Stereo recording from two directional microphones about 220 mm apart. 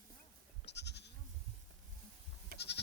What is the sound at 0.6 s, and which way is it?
Goat, 50° left (ahead or behind).